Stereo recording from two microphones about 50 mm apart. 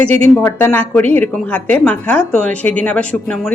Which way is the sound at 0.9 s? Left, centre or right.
Left.